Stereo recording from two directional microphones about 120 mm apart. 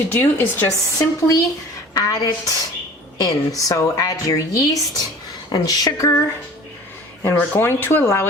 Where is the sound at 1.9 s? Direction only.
30° left (ahead or behind).